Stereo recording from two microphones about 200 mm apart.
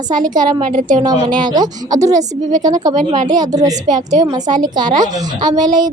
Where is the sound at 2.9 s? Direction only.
40° right (ahead or behind).